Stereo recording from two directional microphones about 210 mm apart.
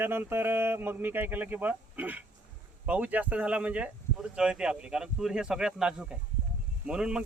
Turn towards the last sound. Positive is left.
turn(degrees=-5)  # may be behind; listen again after turning